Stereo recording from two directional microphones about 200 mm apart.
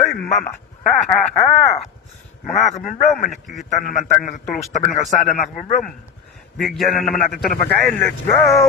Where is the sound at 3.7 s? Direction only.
40° left (ahead or behind).